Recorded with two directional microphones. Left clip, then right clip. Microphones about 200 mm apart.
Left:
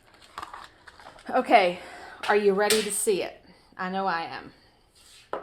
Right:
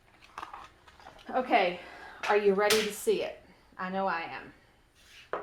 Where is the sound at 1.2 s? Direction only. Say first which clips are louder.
Left 6 dB; 40° left (ahead or behind).